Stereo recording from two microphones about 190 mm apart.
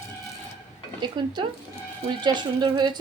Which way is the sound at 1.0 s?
25° right (ahead or behind).